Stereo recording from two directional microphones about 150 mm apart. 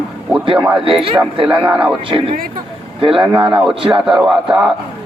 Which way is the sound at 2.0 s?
40° right (ahead or behind).